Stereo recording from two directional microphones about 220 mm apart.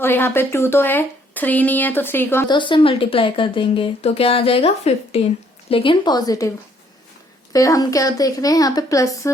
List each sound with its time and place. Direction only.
0.0 s speech: 10° left (ahead or behind)
7.5 s a woman's voice: 15° left (ahead or behind)